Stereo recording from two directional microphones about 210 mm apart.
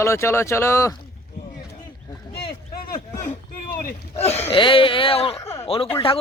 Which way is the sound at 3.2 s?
40° left (ahead or behind).